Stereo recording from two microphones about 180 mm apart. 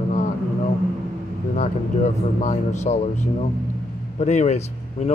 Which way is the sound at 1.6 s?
40° left (ahead or behind).